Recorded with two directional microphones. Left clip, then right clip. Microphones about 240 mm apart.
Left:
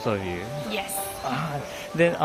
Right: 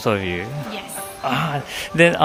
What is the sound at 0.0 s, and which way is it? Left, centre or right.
Speech, right.